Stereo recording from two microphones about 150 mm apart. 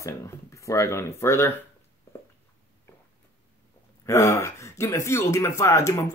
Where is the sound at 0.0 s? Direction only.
20° left (ahead or behind).